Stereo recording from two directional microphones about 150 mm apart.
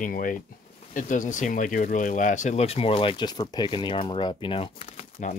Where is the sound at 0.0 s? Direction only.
65° left (ahead or behind).